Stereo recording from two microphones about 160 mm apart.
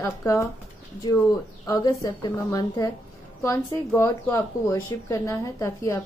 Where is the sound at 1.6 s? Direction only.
20° left (ahead or behind).